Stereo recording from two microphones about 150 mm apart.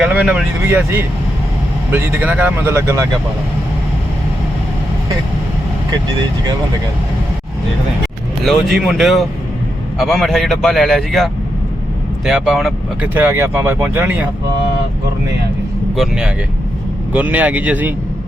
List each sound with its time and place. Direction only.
0.0 s speech: 5° right (ahead or behind)
8.4 s speech: centre (ahead or behind)
13.1 s speech: 15° right (ahead or behind)
16.0 s speech: 5° right (ahead or behind)